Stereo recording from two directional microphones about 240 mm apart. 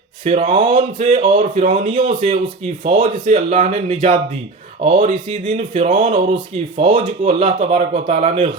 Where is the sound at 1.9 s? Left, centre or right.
Right.